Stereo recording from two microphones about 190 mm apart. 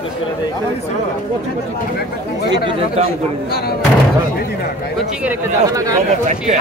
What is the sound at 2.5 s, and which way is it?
Speech, 30° right (ahead or behind).